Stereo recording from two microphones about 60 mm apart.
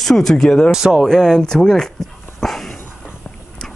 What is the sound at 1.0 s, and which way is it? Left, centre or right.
Speech, centre.